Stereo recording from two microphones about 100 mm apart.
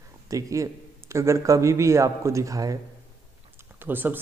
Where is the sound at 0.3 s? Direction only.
35° right (ahead or behind).